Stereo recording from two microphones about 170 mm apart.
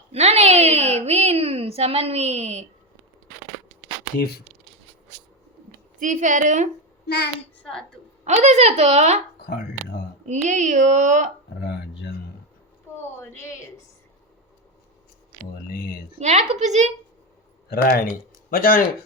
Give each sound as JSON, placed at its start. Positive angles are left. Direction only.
{"t": 0.1, "sound": "a woman's voice", "side_deg": -40}
{"t": 6.0, "sound": "speech", "side_deg": -45}
{"t": 7.6, "sound": "speech", "side_deg": 5}
{"t": 8.2, "sound": "speech", "side_deg": -40}
{"t": 10.2, "sound": "speech", "side_deg": -45}
{"t": 13.1, "sound": "speech", "side_deg": 15}
{"t": 16.1, "sound": "speech", "side_deg": -40}
{"t": 17.7, "sound": "speech", "side_deg": 65}